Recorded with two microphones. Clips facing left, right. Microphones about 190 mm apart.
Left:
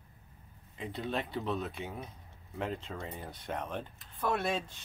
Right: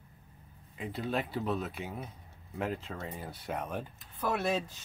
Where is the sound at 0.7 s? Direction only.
5° right (ahead or behind).